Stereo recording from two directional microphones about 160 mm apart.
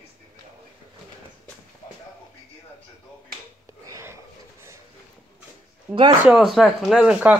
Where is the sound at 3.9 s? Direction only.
15° right (ahead or behind).